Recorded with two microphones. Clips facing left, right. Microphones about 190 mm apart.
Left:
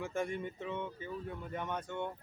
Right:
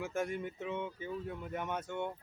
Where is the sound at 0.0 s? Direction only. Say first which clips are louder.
Even; 5° right (ahead or behind).